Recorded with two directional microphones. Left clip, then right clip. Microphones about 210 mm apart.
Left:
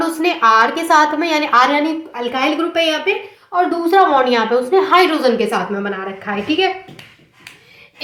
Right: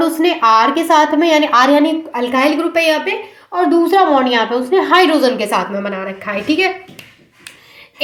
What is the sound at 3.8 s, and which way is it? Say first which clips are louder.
A woman's voice: left 3 dB; 15° right (ahead or behind).